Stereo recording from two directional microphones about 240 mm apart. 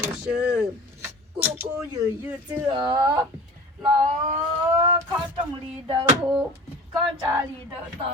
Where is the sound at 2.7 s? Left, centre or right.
Centre.